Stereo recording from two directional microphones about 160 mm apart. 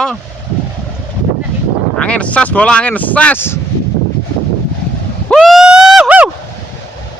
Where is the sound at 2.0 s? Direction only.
5° left (ahead or behind).